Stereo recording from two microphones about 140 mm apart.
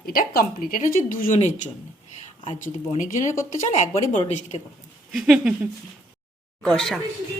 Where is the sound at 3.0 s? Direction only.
65° left (ahead or behind).